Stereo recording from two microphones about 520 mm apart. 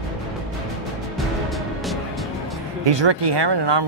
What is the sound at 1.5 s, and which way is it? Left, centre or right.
Music, centre.